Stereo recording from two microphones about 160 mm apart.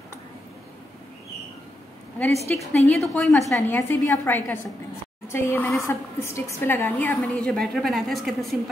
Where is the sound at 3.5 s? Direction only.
10° left (ahead or behind).